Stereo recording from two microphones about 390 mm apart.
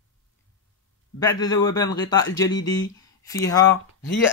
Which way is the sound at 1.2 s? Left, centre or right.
Centre.